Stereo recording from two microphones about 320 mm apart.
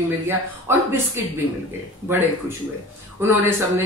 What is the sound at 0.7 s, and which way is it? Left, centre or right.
Speech, centre.